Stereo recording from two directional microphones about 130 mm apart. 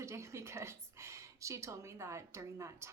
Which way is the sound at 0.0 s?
20° right (ahead or behind).